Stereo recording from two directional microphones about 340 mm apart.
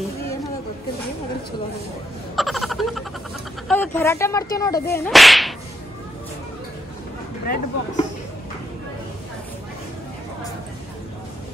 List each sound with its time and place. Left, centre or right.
2.3 s a sound: centre
3.6 s whip: centre
7.4 s speech: left